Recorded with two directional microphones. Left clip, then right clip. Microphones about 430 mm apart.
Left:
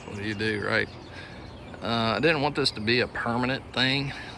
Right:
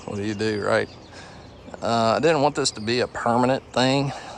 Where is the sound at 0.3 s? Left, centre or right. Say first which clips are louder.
Right 4 dB; centre.